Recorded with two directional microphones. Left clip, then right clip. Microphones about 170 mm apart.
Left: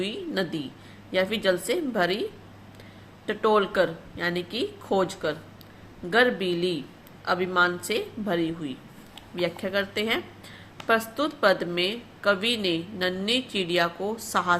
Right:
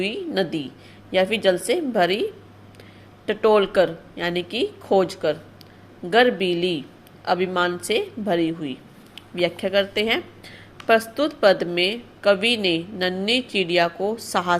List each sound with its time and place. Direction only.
0.0 s a woman's voice: 20° right (ahead or behind)
3.2 s a woman's voice: 25° right (ahead or behind)